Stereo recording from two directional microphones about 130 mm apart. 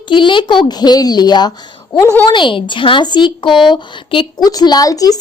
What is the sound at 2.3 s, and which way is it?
A woman's voice, 40° left (ahead or behind).